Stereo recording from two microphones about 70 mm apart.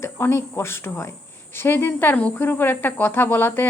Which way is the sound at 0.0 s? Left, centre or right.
Left.